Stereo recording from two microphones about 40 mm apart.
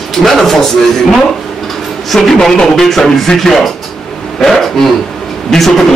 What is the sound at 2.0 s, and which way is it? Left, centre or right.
A man's voice, centre.